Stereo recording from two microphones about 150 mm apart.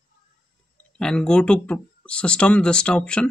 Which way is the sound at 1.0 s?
5° left (ahead or behind).